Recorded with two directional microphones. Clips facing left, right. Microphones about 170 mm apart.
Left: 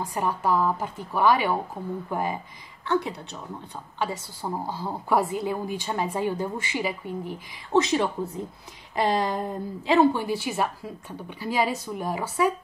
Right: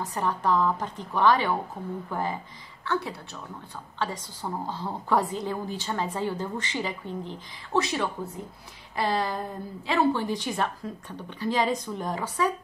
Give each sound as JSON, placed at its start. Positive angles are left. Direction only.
{"t": 0.0, "sound": "a woman's voice", "side_deg": 10}